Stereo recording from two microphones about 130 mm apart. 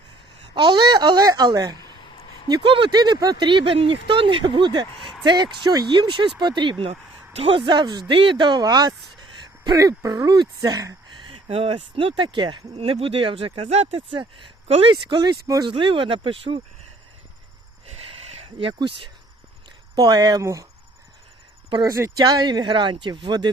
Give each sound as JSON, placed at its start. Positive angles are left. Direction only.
{"t": 0.5, "sound": "speech", "side_deg": -35}
{"t": 11.3, "sound": "speech", "side_deg": -45}
{"t": 14.1, "sound": "speech", "side_deg": -40}
{"t": 15.7, "sound": "speech", "side_deg": -40}
{"t": 17.8, "sound": "a sound", "side_deg": -50}
{"t": 18.8, "sound": "speech", "side_deg": -40}
{"t": 21.7, "sound": "speech", "side_deg": -35}